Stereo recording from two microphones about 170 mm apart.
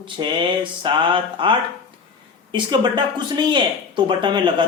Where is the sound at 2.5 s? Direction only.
25° right (ahead or behind).